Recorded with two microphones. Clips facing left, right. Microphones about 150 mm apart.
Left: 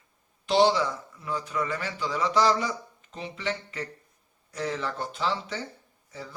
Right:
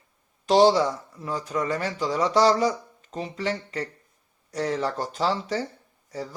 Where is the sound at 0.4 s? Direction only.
40° right (ahead or behind).